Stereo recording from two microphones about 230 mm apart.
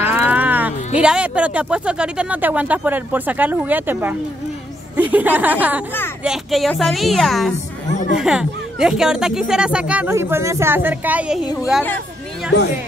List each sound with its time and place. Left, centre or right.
0.1 s a woman's voice: centre
12.5 s speech: left